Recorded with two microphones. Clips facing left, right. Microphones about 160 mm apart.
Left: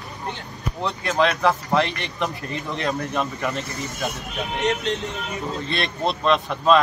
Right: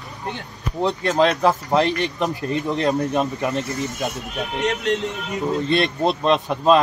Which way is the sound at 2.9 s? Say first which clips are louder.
Right 5 dB; 20° right (ahead or behind).